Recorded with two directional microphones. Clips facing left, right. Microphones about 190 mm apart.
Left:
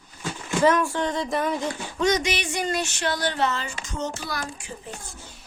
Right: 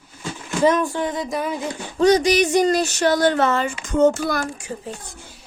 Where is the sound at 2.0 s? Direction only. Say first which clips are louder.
Right 9 dB; 35° right (ahead or behind); by 4.4 s 50° right (ahead or behind).